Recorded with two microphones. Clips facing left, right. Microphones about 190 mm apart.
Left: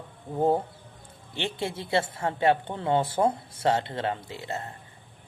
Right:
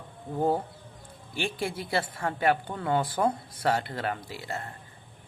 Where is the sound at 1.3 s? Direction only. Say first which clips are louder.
Even; 25° left (ahead or behind).